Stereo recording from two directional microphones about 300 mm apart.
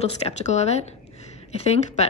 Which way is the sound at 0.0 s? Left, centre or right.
Left.